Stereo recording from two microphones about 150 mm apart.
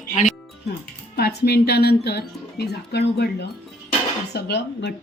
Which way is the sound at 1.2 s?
90° left.